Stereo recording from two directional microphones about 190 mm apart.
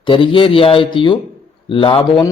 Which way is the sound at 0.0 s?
25° left (ahead or behind).